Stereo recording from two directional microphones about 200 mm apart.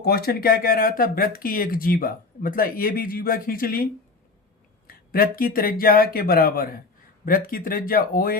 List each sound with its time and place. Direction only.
0.0 s speech: 50° left (ahead or behind)
4.9 s speech: 45° left (ahead or behind)